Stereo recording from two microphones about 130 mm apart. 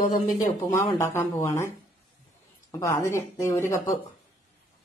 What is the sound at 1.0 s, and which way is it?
Speech, 20° left (ahead or behind).